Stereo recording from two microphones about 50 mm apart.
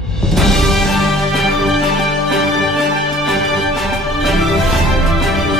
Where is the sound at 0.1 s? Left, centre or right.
Centre.